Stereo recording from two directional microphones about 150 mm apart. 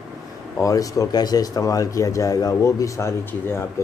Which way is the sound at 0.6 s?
20° left (ahead or behind).